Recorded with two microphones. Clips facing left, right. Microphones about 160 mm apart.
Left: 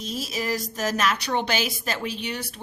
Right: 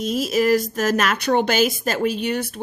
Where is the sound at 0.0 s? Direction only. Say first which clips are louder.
Right 10 dB; 55° right (ahead or behind).